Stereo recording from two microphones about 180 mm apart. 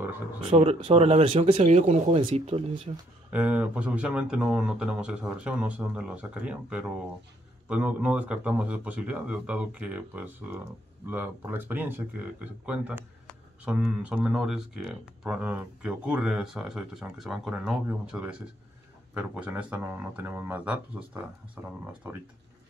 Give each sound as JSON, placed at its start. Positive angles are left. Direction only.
{"t": 0.5, "sound": "speech", "side_deg": -35}
{"t": 3.3, "sound": "a man's voice", "side_deg": -10}